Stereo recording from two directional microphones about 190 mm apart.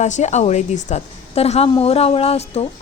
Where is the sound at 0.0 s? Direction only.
35° left (ahead or behind).